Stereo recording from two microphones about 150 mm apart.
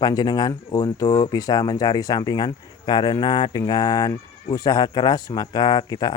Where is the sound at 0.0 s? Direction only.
25° left (ahead or behind).